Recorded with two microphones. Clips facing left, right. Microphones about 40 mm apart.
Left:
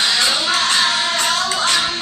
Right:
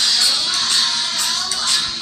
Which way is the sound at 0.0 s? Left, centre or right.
Left.